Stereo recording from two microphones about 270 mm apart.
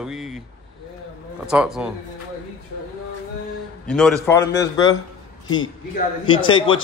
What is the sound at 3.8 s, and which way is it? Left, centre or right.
A man's voice, centre.